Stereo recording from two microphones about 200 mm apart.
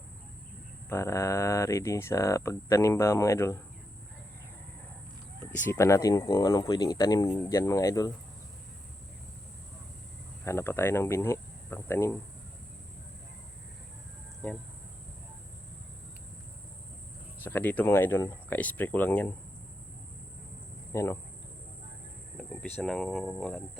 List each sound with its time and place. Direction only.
0.9 s speech: 15° left (ahead or behind)
5.6 s speech: 15° left (ahead or behind)
10.4 s speech: 15° left (ahead or behind)
17.4 s speech: 10° left (ahead or behind)
20.9 s speech: 15° left (ahead or behind)
22.8 s speech: centre (ahead or behind)